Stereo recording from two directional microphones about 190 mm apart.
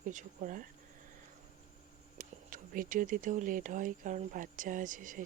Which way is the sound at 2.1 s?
45° right (ahead or behind).